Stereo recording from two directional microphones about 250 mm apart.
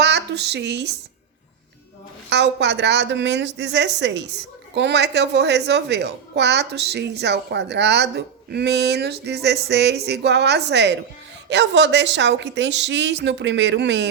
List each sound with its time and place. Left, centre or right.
0.0 s speech: right
2.3 s a woman's voice: right